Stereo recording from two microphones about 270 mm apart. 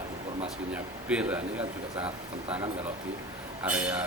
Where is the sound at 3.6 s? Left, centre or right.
Centre.